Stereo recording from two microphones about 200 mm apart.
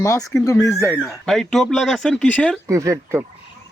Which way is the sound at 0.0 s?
15° left (ahead or behind).